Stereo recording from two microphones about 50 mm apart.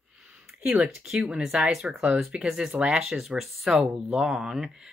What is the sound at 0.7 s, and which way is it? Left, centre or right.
Speech, centre.